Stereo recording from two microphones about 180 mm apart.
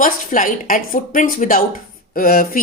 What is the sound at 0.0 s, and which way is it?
Speech, 50° left (ahead or behind).